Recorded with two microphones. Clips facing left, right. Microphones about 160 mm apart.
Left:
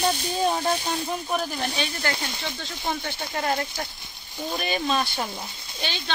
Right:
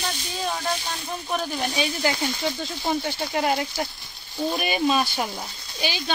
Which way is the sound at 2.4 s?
25° right (ahead or behind).